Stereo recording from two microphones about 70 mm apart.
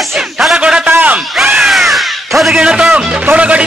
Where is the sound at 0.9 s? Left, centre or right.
Right.